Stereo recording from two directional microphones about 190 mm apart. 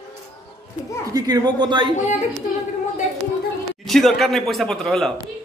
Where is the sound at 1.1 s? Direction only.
20° right (ahead or behind).